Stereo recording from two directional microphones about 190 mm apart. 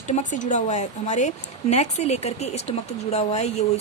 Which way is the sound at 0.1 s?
40° left (ahead or behind).